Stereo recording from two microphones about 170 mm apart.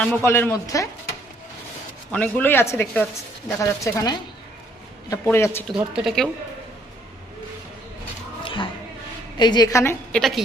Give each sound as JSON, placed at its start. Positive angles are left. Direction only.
{"t": 0.0, "sound": "speech", "side_deg": 15}
{"t": 2.1, "sound": "speech", "side_deg": 10}
{"t": 5.9, "sound": "speech", "side_deg": -5}
{"t": 8.4, "sound": "a sound", "side_deg": 30}
{"t": 9.4, "sound": "a woman's voice", "side_deg": 25}
{"t": 10.1, "sound": "a woman's voice", "side_deg": 0}